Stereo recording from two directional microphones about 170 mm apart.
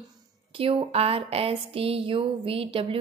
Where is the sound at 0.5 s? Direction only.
35° right (ahead or behind).